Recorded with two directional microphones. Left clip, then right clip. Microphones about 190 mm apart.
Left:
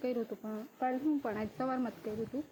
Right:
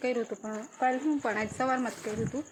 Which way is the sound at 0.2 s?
10° right (ahead or behind).